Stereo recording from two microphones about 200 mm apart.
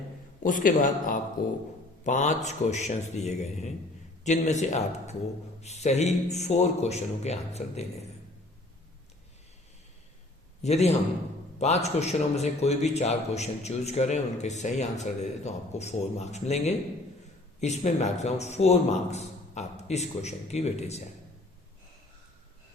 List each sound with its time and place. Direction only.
0.4 s a man's voice: 40° left (ahead or behind)
10.6 s a man's voice: 35° left (ahead or behind)